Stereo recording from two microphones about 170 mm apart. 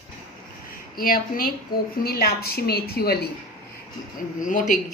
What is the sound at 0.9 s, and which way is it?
A woman's voice, 60° left (ahead or behind).